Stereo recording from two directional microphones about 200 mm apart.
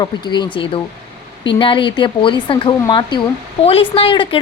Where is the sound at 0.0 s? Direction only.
20° left (ahead or behind).